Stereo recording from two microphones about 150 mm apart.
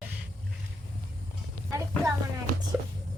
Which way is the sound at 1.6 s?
20° right (ahead or behind).